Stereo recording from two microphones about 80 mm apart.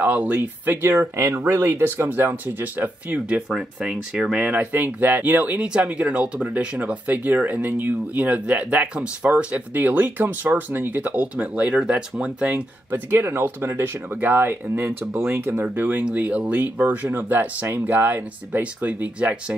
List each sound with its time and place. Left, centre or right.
0.0 s speech: centre
3.4 s speech: centre
4.5 s speech: right
13.1 s speech: right